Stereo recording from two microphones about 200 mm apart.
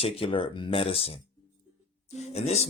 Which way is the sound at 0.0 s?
25° left (ahead or behind).